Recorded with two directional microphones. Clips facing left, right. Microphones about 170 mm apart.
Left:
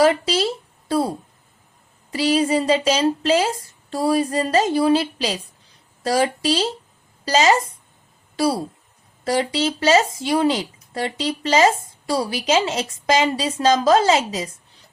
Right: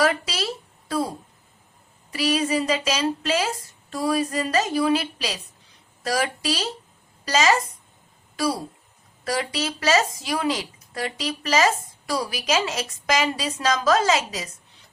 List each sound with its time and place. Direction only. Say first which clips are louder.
0.0 s a sound: left 6 dB; 30° left (ahead or behind)
2.0 s speech: left 4 dB; 30° left (ahead or behind)
9.2 s speech: left 6 dB; 30° left (ahead or behind)